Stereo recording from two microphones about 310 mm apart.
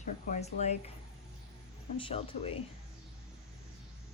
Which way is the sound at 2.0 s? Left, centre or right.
Centre.